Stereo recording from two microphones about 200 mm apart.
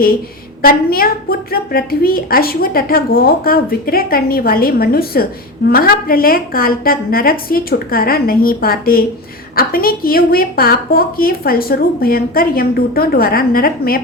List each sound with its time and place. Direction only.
0.6 s a woman's voice: 45° left (ahead or behind)